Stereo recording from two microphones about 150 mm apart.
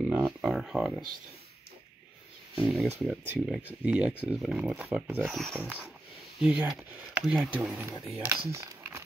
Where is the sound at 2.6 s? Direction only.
5° right (ahead or behind).